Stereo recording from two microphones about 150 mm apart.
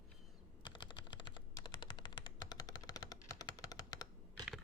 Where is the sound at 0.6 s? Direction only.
30° left (ahead or behind).